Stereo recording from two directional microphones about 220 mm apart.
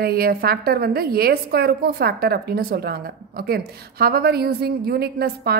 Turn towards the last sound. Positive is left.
turn(degrees=-45)  # may be behind; listen again after turning